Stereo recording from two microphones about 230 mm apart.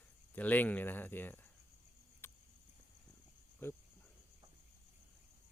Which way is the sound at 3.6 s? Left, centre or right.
Centre.